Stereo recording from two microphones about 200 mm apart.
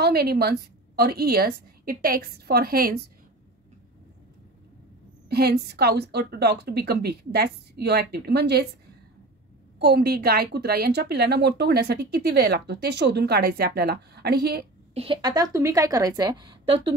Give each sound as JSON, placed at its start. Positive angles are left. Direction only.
{"t": 0.0, "sound": "a woman's voice", "side_deg": -50}
{"t": 5.3, "sound": "a woman's voice", "side_deg": -55}
{"t": 9.8, "sound": "a woman's voice", "side_deg": -55}
{"t": 15.0, "sound": "a woman's voice", "side_deg": -25}